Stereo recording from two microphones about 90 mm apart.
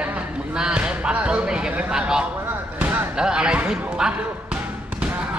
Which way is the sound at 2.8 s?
20° right (ahead or behind).